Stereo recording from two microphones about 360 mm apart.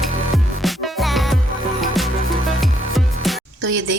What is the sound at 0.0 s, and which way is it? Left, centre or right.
Music, centre.